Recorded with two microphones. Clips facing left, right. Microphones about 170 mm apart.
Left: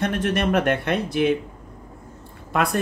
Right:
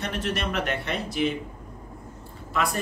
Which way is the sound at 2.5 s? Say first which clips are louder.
Left 5 dB; 60° left (ahead or behind).